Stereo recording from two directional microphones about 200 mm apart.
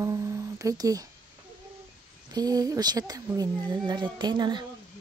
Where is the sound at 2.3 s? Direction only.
20° right (ahead or behind).